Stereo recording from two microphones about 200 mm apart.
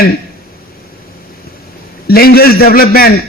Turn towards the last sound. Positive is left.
turn(degrees=50)  # may be behind; listen again after turning